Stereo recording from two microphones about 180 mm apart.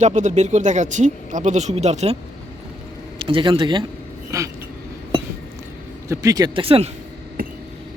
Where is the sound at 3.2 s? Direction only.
30° right (ahead or behind).